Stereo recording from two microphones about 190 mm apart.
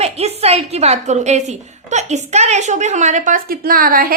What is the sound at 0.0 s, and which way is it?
A woman's voice, 35° right (ahead or behind).